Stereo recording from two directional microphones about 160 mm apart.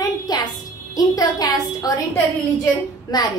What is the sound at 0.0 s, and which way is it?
Music, 25° left (ahead or behind).